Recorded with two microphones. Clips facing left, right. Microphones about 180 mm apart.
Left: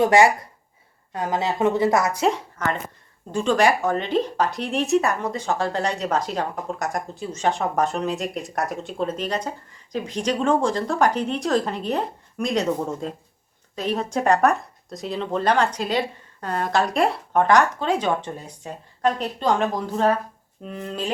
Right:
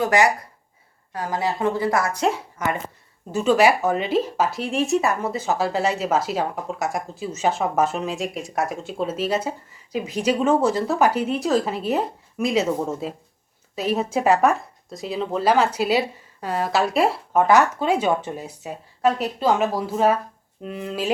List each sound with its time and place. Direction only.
0.0 s a woman's voice: 25° left (ahead or behind)
2.6 s speech: 10° right (ahead or behind)